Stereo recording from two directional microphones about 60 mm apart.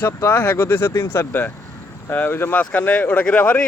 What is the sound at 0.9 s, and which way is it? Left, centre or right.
Speech, left.